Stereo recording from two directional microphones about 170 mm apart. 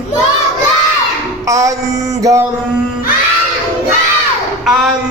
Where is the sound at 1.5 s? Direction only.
20° right (ahead or behind).